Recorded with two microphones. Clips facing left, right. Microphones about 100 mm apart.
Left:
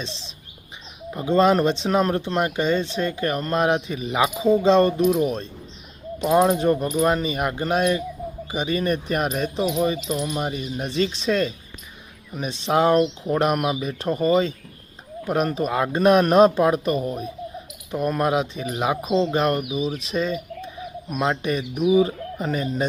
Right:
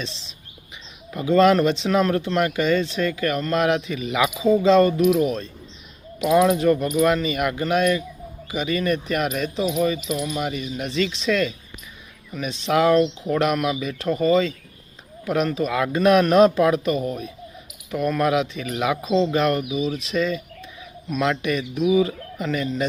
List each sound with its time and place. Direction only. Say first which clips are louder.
1.1 s speech: right 2 dB; 30° left (ahead or behind)
19.0 s speech: right 2 dB; 20° left (ahead or behind)
19.4 s speech: right 1 dB; 30° left (ahead or behind)